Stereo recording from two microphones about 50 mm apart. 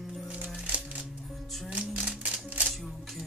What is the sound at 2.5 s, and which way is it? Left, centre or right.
Single-lens reflex camera, right.